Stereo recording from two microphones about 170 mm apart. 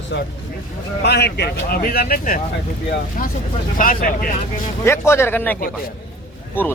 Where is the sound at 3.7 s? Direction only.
55° left (ahead or behind).